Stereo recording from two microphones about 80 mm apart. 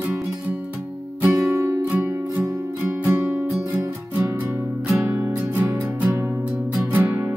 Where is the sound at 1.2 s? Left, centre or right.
Right.